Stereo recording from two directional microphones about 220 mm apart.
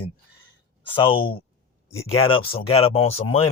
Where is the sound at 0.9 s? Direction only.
20° left (ahead or behind).